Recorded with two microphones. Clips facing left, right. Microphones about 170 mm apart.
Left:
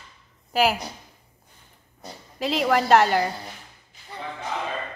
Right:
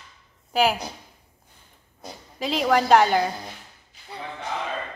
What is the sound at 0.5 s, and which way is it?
Speech, centre (ahead or behind).